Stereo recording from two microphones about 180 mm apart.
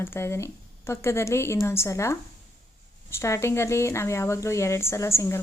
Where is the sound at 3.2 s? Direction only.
15° left (ahead or behind).